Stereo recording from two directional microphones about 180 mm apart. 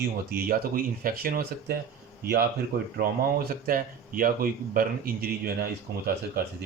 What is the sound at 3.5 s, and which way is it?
Speech, 50° right (ahead or behind).